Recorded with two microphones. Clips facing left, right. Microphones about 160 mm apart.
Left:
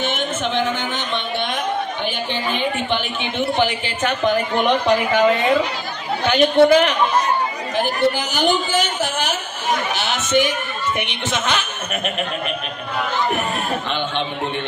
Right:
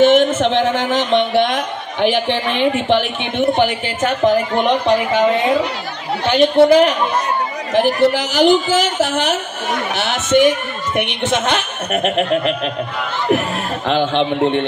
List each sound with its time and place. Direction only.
0.0 s a sound: 90° right
0.7 s a man's voice: 90° right; by 4.4 s 40° right (ahead or behind)
4.6 s speech: 25° right (ahead or behind)
7.7 s a man's voice: 90° right
9.9 s speech: 60° right (ahead or behind)
13.8 s a man's voice: 90° right